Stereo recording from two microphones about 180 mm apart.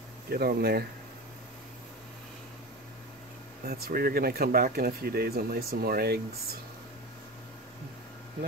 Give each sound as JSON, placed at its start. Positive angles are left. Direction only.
{"t": 0.3, "sound": "speech", "side_deg": -60}
{"t": 3.6, "sound": "speech", "side_deg": -55}